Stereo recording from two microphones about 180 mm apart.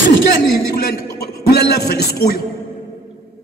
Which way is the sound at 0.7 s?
60° left (ahead or behind).